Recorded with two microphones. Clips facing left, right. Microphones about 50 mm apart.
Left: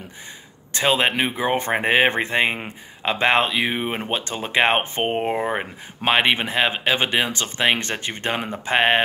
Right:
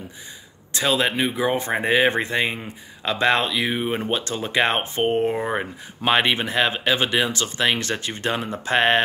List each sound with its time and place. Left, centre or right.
0.7 s speech: left
5.6 s speech: left
8.5 s speech: centre